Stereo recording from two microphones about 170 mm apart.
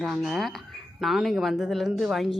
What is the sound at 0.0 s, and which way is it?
Speech, centre (ahead or behind).